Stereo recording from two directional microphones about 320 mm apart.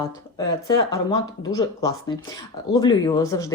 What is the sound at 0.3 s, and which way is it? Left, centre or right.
Speech, centre.